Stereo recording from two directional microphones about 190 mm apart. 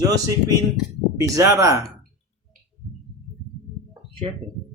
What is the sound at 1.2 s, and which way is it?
Mantra, 20° right (ahead or behind).